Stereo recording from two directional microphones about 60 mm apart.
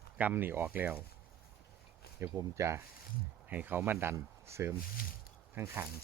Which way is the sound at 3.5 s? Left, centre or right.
Right.